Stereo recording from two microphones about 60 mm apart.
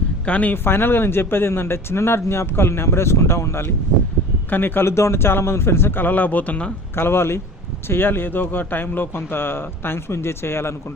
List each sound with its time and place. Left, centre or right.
0.3 s speech: left
0.5 s speech: left
4.4 s a man's voice: left
6.9 s a man's voice: left